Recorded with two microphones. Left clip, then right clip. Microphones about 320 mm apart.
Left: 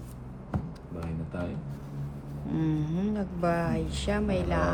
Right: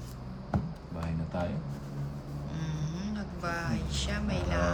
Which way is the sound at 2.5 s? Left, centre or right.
Centre.